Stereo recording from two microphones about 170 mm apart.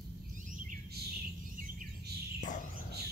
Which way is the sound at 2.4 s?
50° left (ahead or behind).